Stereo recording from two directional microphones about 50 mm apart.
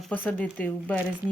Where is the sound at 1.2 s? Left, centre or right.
Right.